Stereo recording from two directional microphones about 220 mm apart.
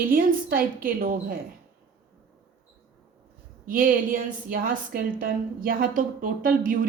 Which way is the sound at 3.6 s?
40° right (ahead or behind).